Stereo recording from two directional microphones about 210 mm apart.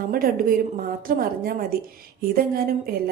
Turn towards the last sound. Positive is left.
turn(degrees=-45)  # may be behind; listen again after turning